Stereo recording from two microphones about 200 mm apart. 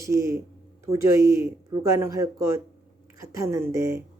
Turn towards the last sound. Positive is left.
turn(degrees=-15)  # may be behind; listen again after turning